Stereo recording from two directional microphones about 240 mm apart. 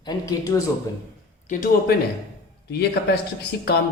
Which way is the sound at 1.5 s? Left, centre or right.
Left.